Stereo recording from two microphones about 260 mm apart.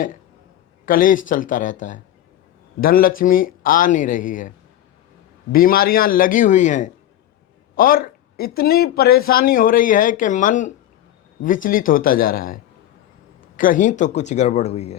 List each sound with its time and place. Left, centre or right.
0.9 s speech: left
13.6 s speech: left